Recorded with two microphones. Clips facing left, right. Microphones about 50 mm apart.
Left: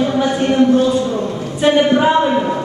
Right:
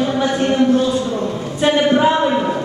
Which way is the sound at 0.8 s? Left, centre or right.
Centre.